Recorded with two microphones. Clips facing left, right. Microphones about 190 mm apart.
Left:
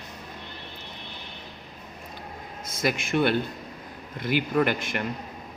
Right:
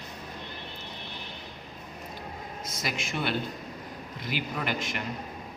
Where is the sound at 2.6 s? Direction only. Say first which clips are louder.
Left 8 dB; 55° left (ahead or behind).